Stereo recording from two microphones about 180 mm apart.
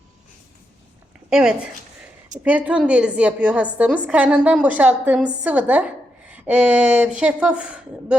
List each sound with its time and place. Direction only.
1.3 s a woman's voice: 5° right (ahead or behind)